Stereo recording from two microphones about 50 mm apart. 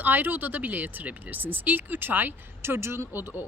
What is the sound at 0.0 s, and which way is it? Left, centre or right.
Speech, right.